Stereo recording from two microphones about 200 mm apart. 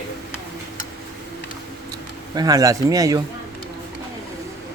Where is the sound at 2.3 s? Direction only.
20° right (ahead or behind).